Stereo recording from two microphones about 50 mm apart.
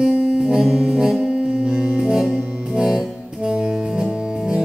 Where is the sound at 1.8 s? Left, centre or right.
Right.